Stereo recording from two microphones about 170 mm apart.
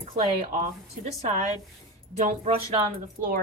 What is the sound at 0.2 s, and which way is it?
A woman's voice, 45° right (ahead or behind).